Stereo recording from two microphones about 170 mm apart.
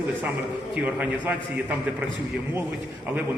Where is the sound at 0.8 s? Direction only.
10° right (ahead or behind).